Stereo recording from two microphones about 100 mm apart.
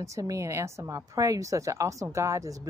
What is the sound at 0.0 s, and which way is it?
Speech, 35° right (ahead or behind).